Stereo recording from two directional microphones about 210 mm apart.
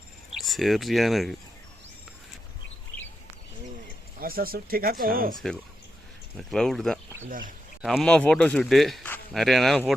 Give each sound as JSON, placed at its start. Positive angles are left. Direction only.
{"t": 0.3, "sound": "speech", "side_deg": 0}
{"t": 4.2, "sound": "speech", "side_deg": -45}
{"t": 6.5, "sound": "speech", "side_deg": 0}
{"t": 7.3, "sound": "speech", "side_deg": -40}
{"t": 7.8, "sound": "speech", "side_deg": 0}